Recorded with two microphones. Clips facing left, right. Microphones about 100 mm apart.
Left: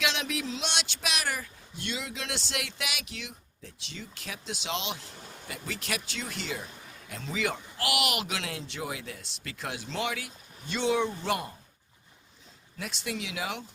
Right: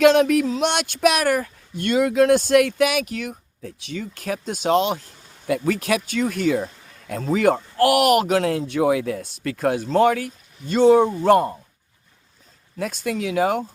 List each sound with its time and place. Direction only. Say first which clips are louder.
0.0 s speech: right 17 dB; 50° right (ahead or behind)
5.5 s speech: right 16 dB; 55° right (ahead or behind)
12.7 s speech: right 10 dB; 45° right (ahead or behind)